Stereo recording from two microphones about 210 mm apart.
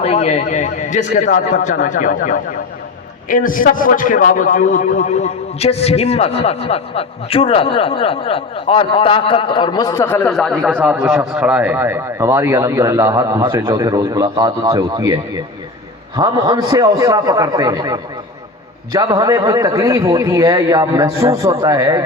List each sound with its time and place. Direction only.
0.0 s a man's voice: 30° left (ahead or behind); by 10.2 s 15° left (ahead or behind)
10.2 s a man's voice: centre (ahead or behind); by 22.0 s 15° right (ahead or behind)